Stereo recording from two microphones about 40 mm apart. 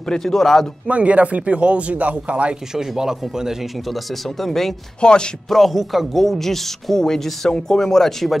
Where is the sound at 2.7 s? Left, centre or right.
Centre.